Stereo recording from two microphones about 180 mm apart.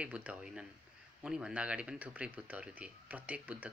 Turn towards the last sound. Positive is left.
turn(degrees=-5)  # may be behind; listen again after turning